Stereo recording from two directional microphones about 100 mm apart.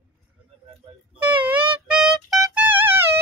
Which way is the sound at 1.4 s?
15° right (ahead or behind).